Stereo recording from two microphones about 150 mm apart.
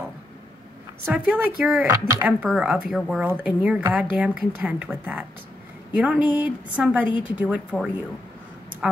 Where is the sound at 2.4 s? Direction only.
5° right (ahead or behind).